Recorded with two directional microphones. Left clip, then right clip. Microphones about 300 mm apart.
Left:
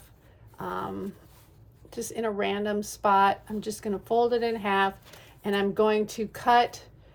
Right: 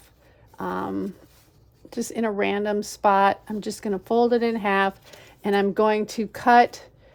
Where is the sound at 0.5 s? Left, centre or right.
Right.